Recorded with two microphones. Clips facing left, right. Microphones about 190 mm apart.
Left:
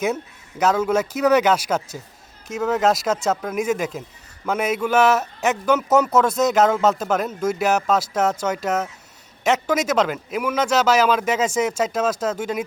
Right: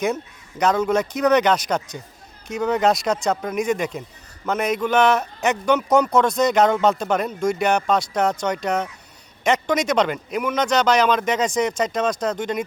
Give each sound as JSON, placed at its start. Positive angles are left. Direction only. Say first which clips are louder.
{"t": 0.6, "sound": "a man's voice", "louder": "even", "side_deg": 5}